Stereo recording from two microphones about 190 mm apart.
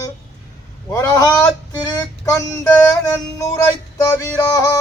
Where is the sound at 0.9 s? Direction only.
15° left (ahead or behind).